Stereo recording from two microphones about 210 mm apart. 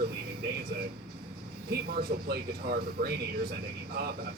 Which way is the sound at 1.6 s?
45° right (ahead or behind).